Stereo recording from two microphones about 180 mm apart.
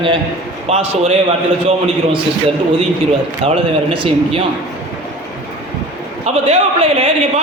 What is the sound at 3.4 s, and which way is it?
Speech, 35° right (ahead or behind).